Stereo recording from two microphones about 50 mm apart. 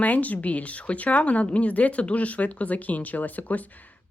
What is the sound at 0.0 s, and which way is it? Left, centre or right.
Speech, left.